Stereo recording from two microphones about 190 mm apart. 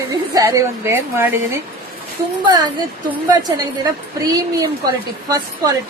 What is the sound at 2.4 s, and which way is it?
A woman's voice, 25° right (ahead or behind).